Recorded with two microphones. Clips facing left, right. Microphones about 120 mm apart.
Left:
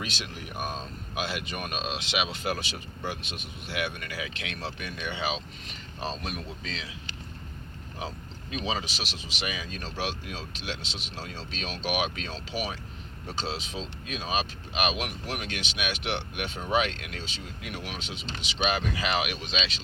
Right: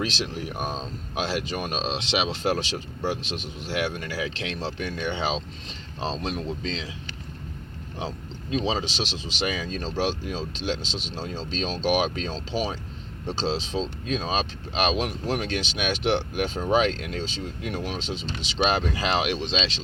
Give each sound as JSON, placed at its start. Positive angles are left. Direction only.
{"t": 0.0, "sound": "speech", "side_deg": -30}
{"t": 7.9, "sound": "speech", "side_deg": -30}